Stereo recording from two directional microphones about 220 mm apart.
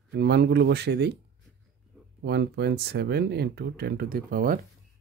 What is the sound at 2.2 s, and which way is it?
Speech, 50° right (ahead or behind).